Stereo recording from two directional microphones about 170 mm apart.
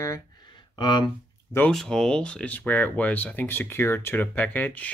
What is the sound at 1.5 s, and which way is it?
Speech, 10° left (ahead or behind).